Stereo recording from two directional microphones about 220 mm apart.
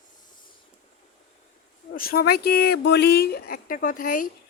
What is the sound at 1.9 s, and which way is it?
Speech, 40° left (ahead or behind).